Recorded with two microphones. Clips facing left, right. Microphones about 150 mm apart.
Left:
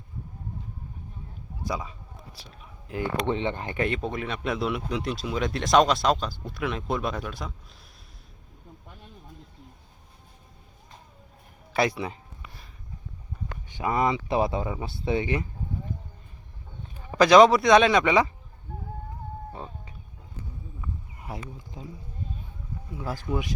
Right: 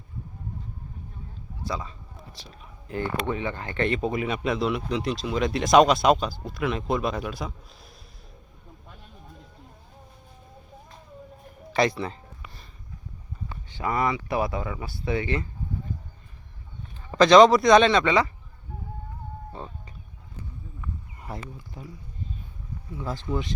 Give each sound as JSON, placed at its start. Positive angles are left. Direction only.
{"t": 1.6, "sound": "speech", "side_deg": 10}
{"t": 3.2, "sound": "speech", "side_deg": 25}
{"t": 3.8, "sound": "speech", "side_deg": 0}
{"t": 11.7, "sound": "speech", "side_deg": 5}
{"t": 13.7, "sound": "speech", "side_deg": 15}
{"t": 17.0, "sound": "a man's voice", "side_deg": 10}
{"t": 21.2, "sound": "speech", "side_deg": 10}
{"t": 23.0, "sound": "a man's voice", "side_deg": 10}